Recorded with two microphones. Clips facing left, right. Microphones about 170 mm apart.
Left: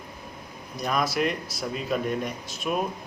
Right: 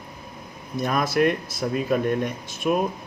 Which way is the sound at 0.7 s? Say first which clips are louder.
Right 4 dB; 50° right (ahead or behind).